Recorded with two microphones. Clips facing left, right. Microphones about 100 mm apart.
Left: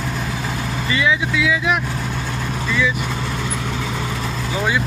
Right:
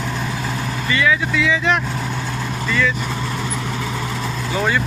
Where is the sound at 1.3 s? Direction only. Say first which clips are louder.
Right 1 dB; 5° left (ahead or behind).